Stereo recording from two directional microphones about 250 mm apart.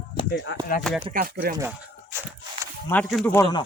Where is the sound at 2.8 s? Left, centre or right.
Centre.